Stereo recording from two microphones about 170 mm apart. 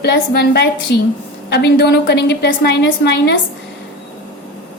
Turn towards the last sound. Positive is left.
turn(degrees=75)  # may be behind; listen again after turning